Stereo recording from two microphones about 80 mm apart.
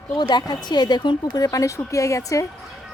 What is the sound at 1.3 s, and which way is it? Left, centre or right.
Speech, left.